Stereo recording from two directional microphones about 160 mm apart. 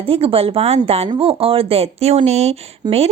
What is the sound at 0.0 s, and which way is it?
A woman's voice, 35° right (ahead or behind).